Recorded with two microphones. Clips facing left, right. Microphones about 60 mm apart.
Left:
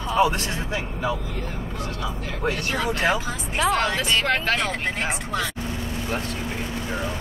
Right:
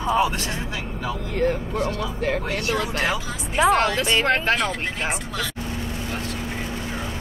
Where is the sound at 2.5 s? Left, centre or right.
Left.